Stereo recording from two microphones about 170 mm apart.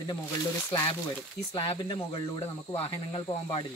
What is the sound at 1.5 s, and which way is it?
Speech, 30° left (ahead or behind).